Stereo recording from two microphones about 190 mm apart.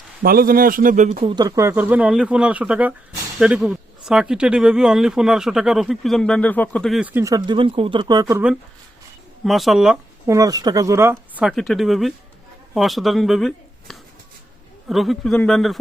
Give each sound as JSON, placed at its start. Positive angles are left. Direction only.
{"t": 0.2, "sound": "speech", "side_deg": -50}
{"t": 1.2, "sound": "speech", "side_deg": -25}
{"t": 7.1, "sound": "speech", "side_deg": -15}
{"t": 9.4, "sound": "speech", "side_deg": 0}
{"t": 10.2, "sound": "speech", "side_deg": -20}